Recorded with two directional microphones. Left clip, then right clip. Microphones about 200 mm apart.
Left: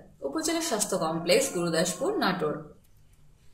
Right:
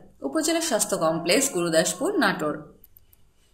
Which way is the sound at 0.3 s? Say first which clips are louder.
Right 5 dB; 40° right (ahead or behind).